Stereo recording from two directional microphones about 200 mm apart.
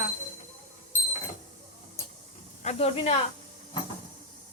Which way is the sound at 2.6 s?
30° left (ahead or behind).